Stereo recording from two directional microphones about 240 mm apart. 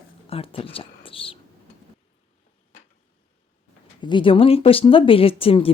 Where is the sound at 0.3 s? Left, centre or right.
Left.